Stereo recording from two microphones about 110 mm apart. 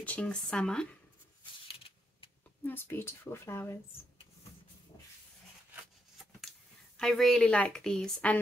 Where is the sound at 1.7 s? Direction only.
55° left (ahead or behind).